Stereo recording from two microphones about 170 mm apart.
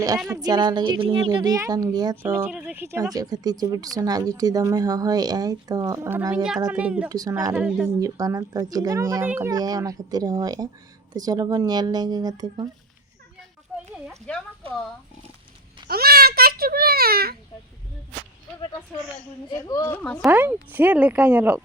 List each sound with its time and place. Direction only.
0.3 s speech: 25° right (ahead or behind)
2.2 s speech: 10° right (ahead or behind)
7.1 s speech: 20° right (ahead or behind)
7.5 s speech: 5° right (ahead or behind)
7.9 s speech: 20° right (ahead or behind)
13.7 s a sound: centre (ahead or behind)
15.9 s a sound: 60° right (ahead or behind)
19.5 s a woman's voice: 20° left (ahead or behind)
19.9 s speech: 10° left (ahead or behind)
20.2 s speech: 10° right (ahead or behind)